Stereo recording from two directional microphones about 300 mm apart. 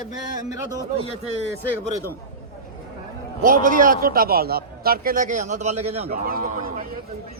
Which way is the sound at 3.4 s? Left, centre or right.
Right.